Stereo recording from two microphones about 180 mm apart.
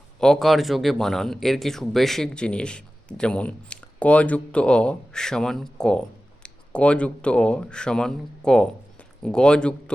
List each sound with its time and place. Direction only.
0.2 s speech: centre (ahead or behind)